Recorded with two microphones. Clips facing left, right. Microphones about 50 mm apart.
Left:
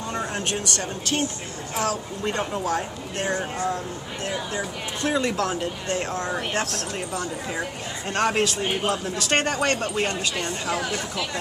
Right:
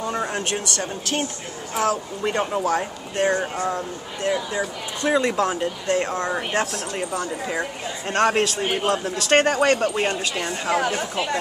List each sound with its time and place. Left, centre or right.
0.1 s a sound: centre
1.8 s speech: right
6.3 s speech: centre
8.1 s a man's voice: centre; by 11.2 s right